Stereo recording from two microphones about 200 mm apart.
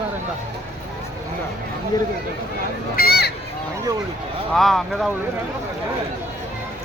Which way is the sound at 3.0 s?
50° left (ahead or behind).